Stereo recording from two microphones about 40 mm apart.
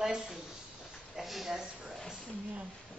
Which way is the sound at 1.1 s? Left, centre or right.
Centre.